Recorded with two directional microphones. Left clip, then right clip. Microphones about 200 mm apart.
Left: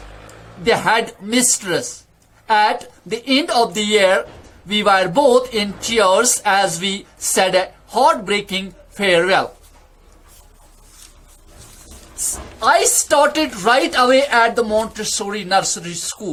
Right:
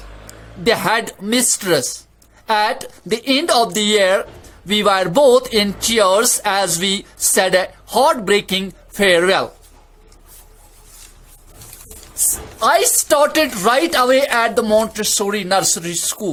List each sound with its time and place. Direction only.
0.3 s speech: 45° right (ahead or behind)
12.5 s a woman's voice: 45° right (ahead or behind)